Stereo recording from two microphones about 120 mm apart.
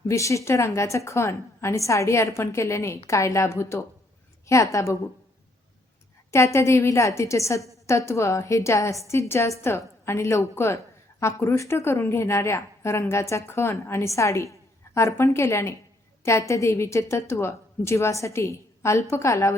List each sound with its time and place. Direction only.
0.1 s a woman's voice: 25° left (ahead or behind)
6.3 s a woman's voice: 25° left (ahead or behind)